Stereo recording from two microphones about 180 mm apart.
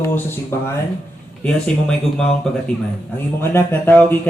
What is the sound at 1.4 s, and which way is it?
Speech, 5° left (ahead or behind).